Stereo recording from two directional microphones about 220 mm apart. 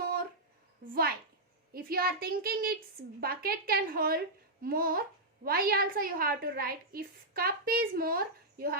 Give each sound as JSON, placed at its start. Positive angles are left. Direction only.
{"t": 1.7, "sound": "a woman's voice", "side_deg": -45}